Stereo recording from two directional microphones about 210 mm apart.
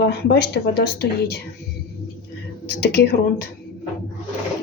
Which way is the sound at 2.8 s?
50° left (ahead or behind).